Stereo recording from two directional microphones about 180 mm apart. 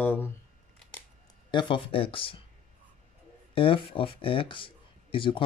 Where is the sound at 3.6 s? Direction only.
30° left (ahead or behind).